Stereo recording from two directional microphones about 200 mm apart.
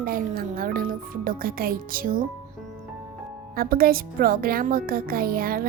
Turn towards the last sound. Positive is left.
turn(degrees=-45)  # may be behind; listen again after turning